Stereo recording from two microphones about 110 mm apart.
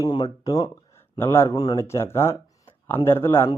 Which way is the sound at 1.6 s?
35° left (ahead or behind).